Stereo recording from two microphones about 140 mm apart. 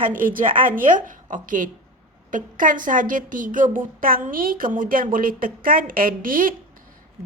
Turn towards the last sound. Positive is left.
turn(degrees=-80)